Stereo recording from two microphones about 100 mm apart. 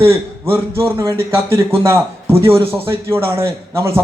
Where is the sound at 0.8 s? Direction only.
30° right (ahead or behind).